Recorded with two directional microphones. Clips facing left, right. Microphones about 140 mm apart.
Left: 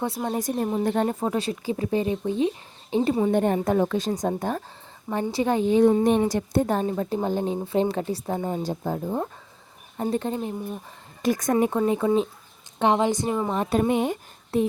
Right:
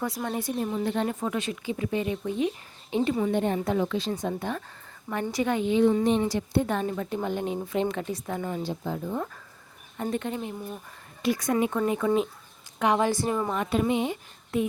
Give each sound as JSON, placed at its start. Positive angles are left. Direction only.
{"t": 0.0, "sound": "a woman's voice", "side_deg": 25}
{"t": 0.3, "sound": "a woman's voice", "side_deg": 45}
{"t": 3.3, "sound": "a woman's voice", "side_deg": 45}
{"t": 8.6, "sound": "a woman's voice", "side_deg": 40}
{"t": 11.2, "sound": "a woman's voice", "side_deg": 45}
{"t": 11.9, "sound": "a woman's voice", "side_deg": 30}
{"t": 13.5, "sound": "a woman's voice", "side_deg": 35}
{"t": 14.5, "sound": "a woman's voice", "side_deg": 35}